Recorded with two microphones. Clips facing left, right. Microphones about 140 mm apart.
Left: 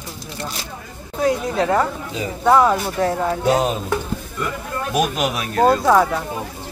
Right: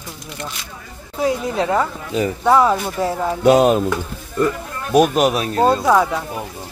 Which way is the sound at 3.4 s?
65° right (ahead or behind).